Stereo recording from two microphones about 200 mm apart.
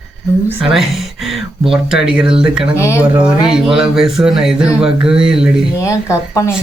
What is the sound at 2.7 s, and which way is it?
Speech, 15° left (ahead or behind).